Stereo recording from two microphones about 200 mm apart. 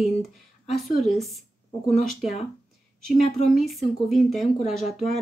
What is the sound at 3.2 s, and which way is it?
Speech, 35° left (ahead or behind).